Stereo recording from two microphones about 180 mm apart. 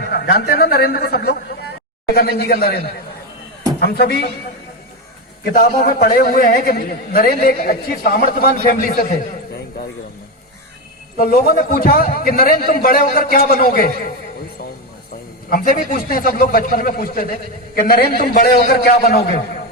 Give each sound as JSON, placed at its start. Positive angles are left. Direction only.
{"t": 0.1, "sound": "a man's voice", "side_deg": 65}
{"t": 5.5, "sound": "a man's voice", "side_deg": 55}
{"t": 9.6, "sound": "a sound", "side_deg": 60}
{"t": 11.2, "sound": "a man's voice", "side_deg": 55}
{"t": 15.4, "sound": "a man's voice", "side_deg": 50}